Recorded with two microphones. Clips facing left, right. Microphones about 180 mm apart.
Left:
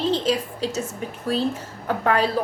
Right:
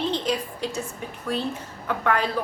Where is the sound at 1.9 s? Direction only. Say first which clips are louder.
Left 3 dB; 35° left (ahead or behind).